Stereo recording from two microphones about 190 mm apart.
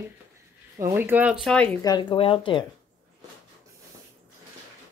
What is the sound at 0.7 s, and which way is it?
Speech, 15° right (ahead or behind).